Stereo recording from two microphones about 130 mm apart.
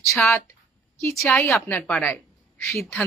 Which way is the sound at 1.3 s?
20° left (ahead or behind).